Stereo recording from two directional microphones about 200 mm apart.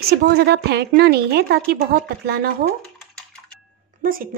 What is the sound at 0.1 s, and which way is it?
Speech, 55° right (ahead or behind).